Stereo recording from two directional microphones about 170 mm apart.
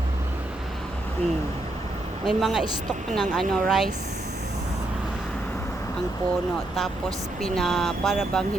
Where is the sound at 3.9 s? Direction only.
45° right (ahead or behind).